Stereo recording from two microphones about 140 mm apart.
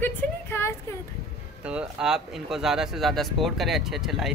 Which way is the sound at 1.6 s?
5° right (ahead or behind).